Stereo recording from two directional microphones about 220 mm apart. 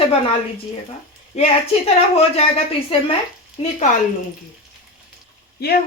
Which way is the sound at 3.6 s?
25° left (ahead or behind).